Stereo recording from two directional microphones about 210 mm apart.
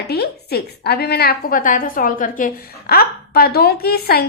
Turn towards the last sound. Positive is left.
turn(degrees=50)  # may be behind; listen again after turning